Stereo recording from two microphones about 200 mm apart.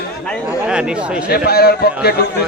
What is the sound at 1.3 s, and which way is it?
Speech, 50° left (ahead or behind).